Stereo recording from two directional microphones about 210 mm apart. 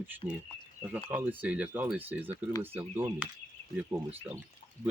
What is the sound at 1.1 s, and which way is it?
Speech, 10° right (ahead or behind).